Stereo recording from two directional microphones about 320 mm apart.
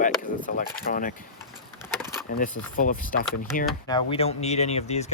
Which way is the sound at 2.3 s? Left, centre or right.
Left.